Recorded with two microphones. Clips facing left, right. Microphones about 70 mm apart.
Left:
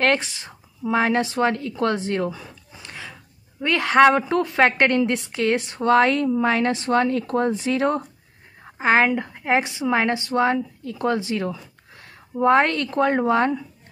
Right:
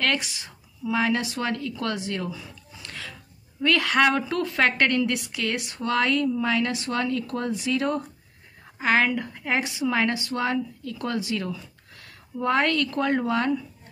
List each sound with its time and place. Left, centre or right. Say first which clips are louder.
0.0 s speech: left 6 dB; left
2.8 s a sound: left 1 dB; left
3.6 s a woman's voice: left 5 dB; left